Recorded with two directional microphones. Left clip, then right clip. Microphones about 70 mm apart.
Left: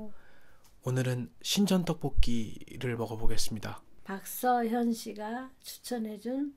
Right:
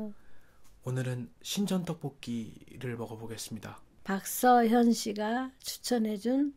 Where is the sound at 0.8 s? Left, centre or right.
Left.